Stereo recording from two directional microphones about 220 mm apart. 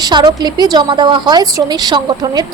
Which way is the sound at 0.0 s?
20° right (ahead or behind).